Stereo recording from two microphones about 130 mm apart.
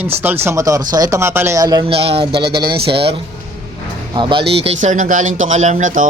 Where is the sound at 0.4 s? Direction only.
25° right (ahead or behind).